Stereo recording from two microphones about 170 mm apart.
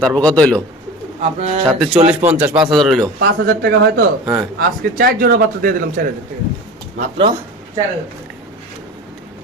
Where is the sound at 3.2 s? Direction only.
75° right (ahead or behind).